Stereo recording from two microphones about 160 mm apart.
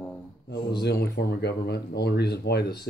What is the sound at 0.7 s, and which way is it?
Speech, 90° left.